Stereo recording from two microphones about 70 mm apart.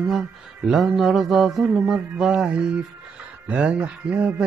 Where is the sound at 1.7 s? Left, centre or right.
Centre.